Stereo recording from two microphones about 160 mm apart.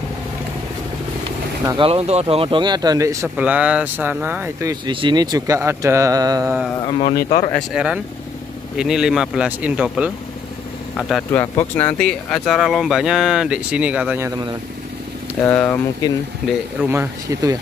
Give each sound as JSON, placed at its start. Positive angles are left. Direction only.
{"t": 1.8, "sound": "speech", "side_deg": -40}
{"t": 6.9, "sound": "a man's voice", "side_deg": 40}
{"t": 7.5, "sound": "speech", "side_deg": -5}
{"t": 11.3, "sound": "speech", "side_deg": 10}
{"t": 15.4, "sound": "speech", "side_deg": 10}
{"t": 16.8, "sound": "speech", "side_deg": -15}